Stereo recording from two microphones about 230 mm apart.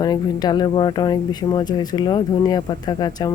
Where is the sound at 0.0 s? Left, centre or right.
Centre.